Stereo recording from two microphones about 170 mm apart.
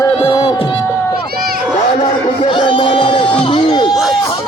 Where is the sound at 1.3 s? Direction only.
60° right (ahead or behind).